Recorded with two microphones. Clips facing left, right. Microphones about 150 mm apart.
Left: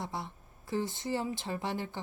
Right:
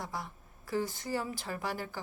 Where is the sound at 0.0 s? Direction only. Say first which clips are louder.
Left 1 dB; 25° left (ahead or behind).